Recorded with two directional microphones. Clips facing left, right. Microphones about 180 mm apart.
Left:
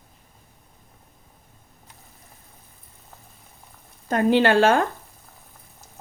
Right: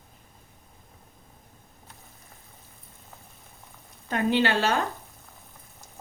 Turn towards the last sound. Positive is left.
turn(degrees=50)  # may be behind; listen again after turning